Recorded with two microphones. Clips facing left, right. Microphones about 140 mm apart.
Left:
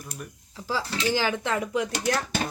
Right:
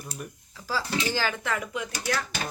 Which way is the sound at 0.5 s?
20° left (ahead or behind).